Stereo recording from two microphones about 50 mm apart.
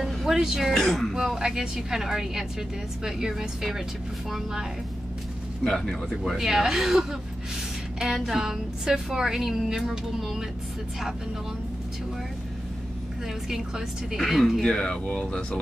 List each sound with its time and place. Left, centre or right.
0.0 s music: centre
0.7 s a woman's voice: centre
1.1 s a woman's voice: centre
5.6 s speech: centre
6.2 s a woman's voice: centre
13.5 s a woman's voice: centre
14.6 s speech: centre